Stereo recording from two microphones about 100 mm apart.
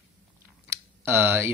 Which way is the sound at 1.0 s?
25° right (ahead or behind).